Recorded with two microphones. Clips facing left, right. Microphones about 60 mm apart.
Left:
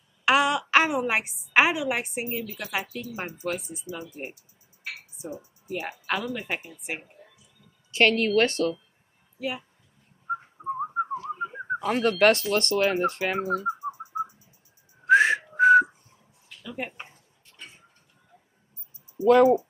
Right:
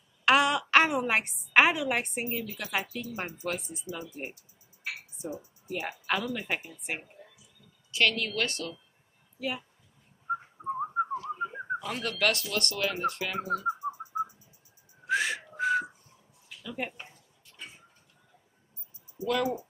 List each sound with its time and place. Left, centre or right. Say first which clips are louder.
0.2 s a woman's voice: left 2 dB; centre
4.8 s a sound: even; centre
5.7 s speech: left 2 dB; centre
7.9 s speech: left 7 dB; left
9.4 s speech: left 2 dB; centre
10.2 s whistling: left 2 dB; centre
11.8 s speech: left 10 dB; left
15.0 s whistling: left 10 dB; left
16.6 s speech: left 1 dB; centre
16.9 s a sound: left 4 dB; left
17.6 s a sound: even; centre
19.1 s speech: left 12 dB; left